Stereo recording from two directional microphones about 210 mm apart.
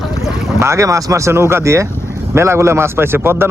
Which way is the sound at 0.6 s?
15° right (ahead or behind).